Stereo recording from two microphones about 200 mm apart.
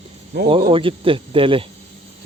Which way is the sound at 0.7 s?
25° right (ahead or behind).